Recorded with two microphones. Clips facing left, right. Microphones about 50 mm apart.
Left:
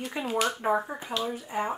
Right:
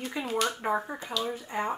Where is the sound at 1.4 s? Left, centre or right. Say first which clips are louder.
Left 1 dB; centre.